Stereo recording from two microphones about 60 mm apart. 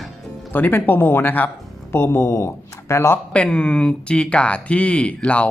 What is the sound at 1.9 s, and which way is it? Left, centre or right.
Speech, left.